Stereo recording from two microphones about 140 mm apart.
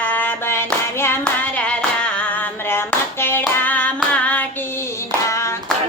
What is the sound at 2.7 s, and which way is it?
Hands, 15° left (ahead or behind).